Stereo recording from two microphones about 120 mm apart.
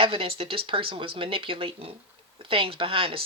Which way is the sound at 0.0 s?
50° right (ahead or behind).